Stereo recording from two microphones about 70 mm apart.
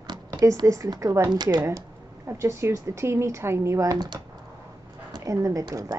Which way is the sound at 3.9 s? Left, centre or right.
Right.